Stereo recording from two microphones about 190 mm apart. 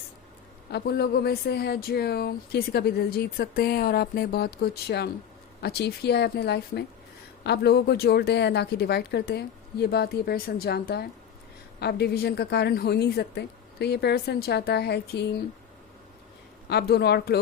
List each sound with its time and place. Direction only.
0.7 s speech: 55° left (ahead or behind)
16.6 s speech: 60° left (ahead or behind)